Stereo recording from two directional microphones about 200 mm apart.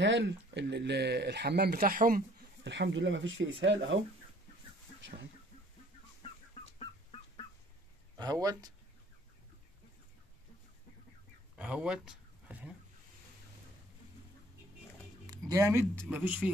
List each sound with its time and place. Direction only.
0.0 s speech: 60° right (ahead or behind); by 2.2 s 45° right (ahead or behind)
2.6 s speech: 65° right (ahead or behind)
6.8 s fowl: 25° left (ahead or behind)
8.2 s speech: 20° right (ahead or behind)
11.5 s a sound: 5° right (ahead or behind)
15.2 s a sound: 15° right (ahead or behind)
16.1 s speech: 5° right (ahead or behind)